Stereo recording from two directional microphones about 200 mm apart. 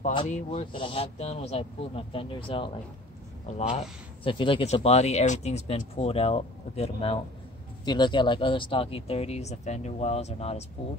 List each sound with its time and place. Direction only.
0.1 s speech: 30° left (ahead or behind)